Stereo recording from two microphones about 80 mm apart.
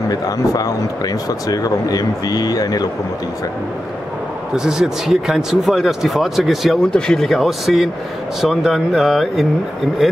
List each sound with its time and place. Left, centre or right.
0.1 s speech: left
4.6 s speech: centre